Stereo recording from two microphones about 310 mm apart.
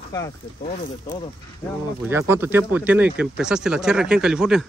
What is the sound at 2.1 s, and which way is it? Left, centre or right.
Speech, centre.